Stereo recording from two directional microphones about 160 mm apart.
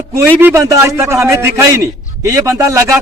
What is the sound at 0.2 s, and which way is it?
A man's voice, 15° right (ahead or behind).